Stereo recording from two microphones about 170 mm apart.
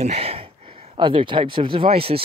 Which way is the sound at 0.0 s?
35° right (ahead or behind).